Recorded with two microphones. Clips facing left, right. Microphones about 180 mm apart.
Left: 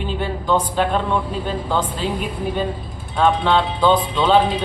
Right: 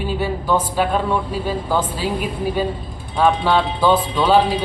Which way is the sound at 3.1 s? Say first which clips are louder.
Even; 5° right (ahead or behind).